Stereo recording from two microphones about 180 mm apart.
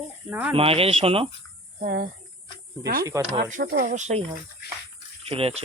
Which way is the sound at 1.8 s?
50° right (ahead or behind).